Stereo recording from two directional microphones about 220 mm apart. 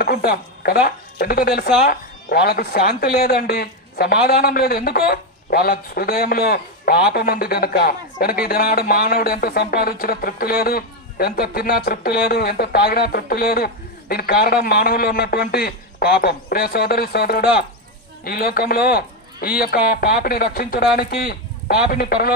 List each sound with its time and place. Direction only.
0.0 s speech: 45° left (ahead or behind)